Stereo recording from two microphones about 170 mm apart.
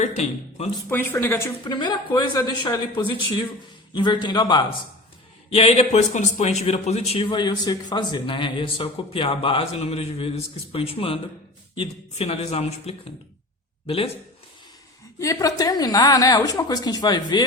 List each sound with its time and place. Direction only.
0.2 s a man's voice: 40° left (ahead or behind)
0.9 s speech: 10° left (ahead or behind)
1.6 s a woman's voice: 25° left (ahead or behind)
5.5 s a man's voice: 35° left (ahead or behind)
15.2 s a woman's voice: 20° left (ahead or behind)